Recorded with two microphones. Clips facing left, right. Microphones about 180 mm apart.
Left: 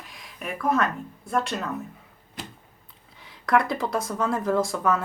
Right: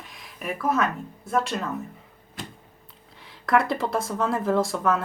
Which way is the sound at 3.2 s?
Centre (ahead or behind).